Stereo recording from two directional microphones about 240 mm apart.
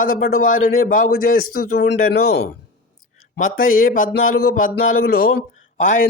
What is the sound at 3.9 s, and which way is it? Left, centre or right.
A man's voice, left.